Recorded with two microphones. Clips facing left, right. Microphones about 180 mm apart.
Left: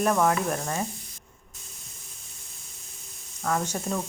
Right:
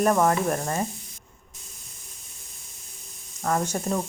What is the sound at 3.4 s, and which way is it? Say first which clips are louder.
Speech: right 2 dB; 20° right (ahead or behind).